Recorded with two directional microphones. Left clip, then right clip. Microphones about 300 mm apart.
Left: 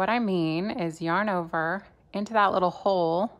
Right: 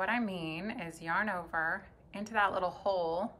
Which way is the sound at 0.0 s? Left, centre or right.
Centre.